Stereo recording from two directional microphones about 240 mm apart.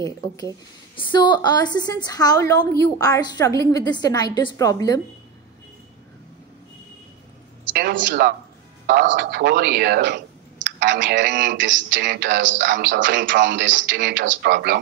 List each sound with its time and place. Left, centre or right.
0.9 s a woman's voice: centre
7.7 s a woman's voice: right